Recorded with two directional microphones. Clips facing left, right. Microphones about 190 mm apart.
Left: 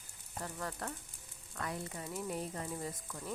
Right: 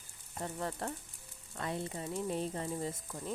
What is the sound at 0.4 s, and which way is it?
Speech, 25° right (ahead or behind).